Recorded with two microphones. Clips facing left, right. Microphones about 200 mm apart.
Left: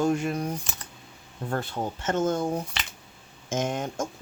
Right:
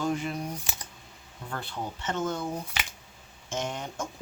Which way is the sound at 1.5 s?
45° left (ahead or behind).